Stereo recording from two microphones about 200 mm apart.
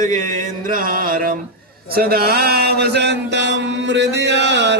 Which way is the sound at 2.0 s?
50° right (ahead or behind).